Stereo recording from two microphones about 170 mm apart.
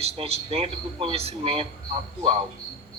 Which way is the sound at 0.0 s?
35° right (ahead or behind).